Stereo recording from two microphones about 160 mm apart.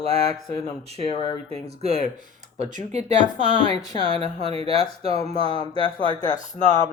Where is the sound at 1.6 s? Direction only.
40° right (ahead or behind).